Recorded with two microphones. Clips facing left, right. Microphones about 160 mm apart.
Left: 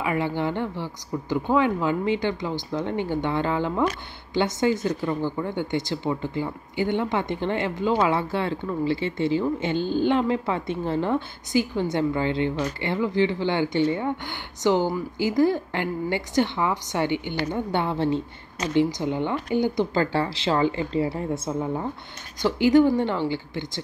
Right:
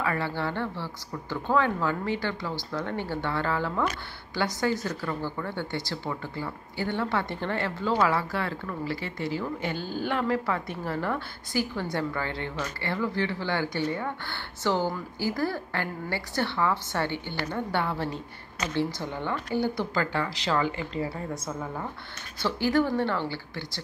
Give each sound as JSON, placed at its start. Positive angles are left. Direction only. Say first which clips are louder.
{"t": 0.0, "sound": "speech", "louder": "left 4 dB", "side_deg": 15}